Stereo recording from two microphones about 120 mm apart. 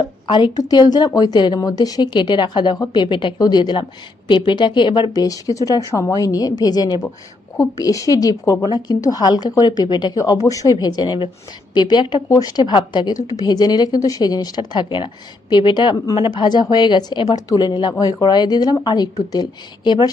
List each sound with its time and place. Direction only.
0.3 s speech: 40° left (ahead or behind)